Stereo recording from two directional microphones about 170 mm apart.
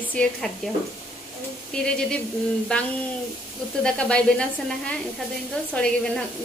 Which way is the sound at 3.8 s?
5° left (ahead or behind).